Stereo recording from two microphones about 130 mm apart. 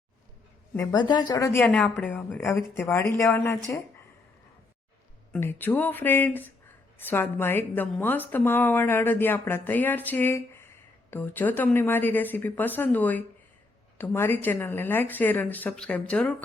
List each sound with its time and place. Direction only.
0.9 s speech: 35° left (ahead or behind)
1.5 s speech: 15° left (ahead or behind)
5.4 s speech: 15° left (ahead or behind)